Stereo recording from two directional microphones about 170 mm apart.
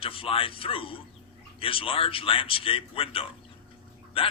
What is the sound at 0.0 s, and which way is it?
A man's voice, 30° left (ahead or behind).